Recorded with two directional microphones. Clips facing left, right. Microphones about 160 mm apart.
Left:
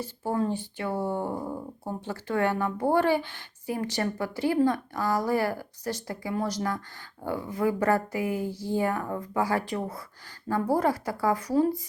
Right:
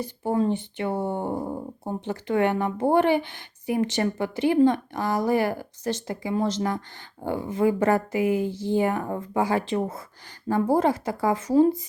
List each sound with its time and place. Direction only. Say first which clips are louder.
0.0 s speech: right 4 dB; 15° right (ahead or behind)